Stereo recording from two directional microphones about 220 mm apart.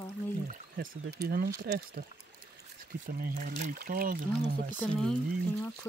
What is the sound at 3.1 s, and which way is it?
Speech, 40° right (ahead or behind).